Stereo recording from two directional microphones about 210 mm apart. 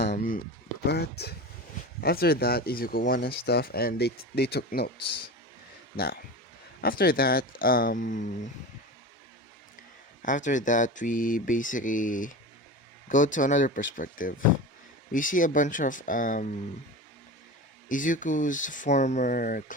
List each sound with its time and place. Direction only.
0.1 s speech: 40° left (ahead or behind)
6.8 s speech: 45° left (ahead or behind)
10.2 s speech: 35° left (ahead or behind)
17.8 s speech: 40° left (ahead or behind)